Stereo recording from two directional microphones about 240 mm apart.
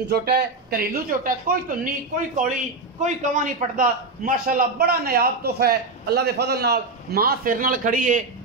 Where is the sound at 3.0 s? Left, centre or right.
Right.